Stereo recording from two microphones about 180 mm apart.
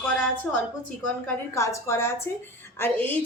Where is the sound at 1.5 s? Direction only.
15° left (ahead or behind).